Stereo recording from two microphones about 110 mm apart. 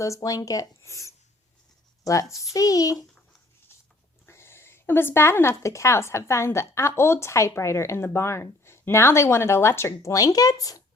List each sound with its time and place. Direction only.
0.0 s speech: 30° left (ahead or behind)
2.3 s a child's voice: 30° left (ahead or behind)
4.3 s speech: 25° left (ahead or behind)